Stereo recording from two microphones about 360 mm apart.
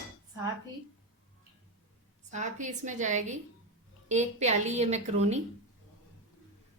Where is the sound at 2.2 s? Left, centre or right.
Centre.